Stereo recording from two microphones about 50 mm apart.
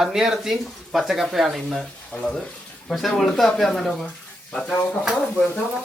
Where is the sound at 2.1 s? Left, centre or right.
Left.